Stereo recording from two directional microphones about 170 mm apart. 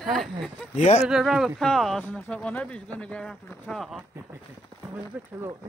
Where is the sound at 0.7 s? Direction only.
40° left (ahead or behind).